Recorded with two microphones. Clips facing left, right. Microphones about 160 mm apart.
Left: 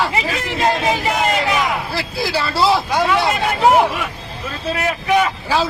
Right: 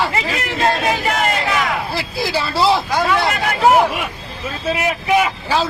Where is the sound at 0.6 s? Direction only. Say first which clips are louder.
Even; 20° left (ahead or behind).